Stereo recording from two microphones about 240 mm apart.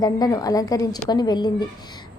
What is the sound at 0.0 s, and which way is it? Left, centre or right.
A woman's voice, centre.